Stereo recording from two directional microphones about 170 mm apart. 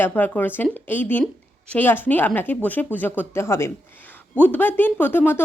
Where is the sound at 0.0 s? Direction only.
10° left (ahead or behind).